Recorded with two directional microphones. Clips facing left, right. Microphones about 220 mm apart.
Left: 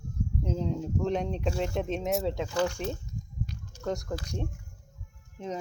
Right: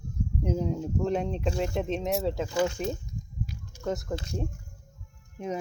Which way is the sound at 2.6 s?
15° right (ahead or behind).